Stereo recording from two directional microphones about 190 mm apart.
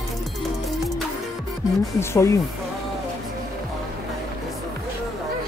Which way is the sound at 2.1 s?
15° left (ahead or behind).